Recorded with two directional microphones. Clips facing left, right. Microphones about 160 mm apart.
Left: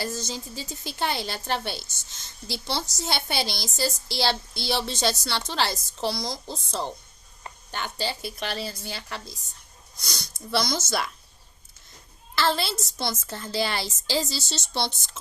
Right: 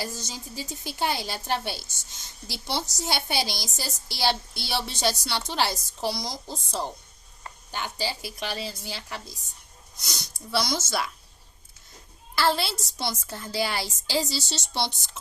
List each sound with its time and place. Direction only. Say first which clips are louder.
0.0 s a woman's voice: left 3 dB; 10° right (ahead or behind)
10.5 s speech: left 1 dB; 5° right (ahead or behind)
12.4 s a woman's voice: even; 10° right (ahead or behind)